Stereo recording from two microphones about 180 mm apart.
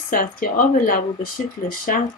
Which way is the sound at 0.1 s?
50° left (ahead or behind).